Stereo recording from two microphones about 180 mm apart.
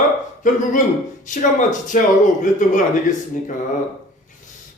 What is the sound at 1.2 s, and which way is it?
Speech, 45° left (ahead or behind).